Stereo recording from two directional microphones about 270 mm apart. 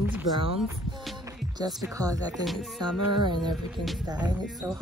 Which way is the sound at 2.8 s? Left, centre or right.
Centre.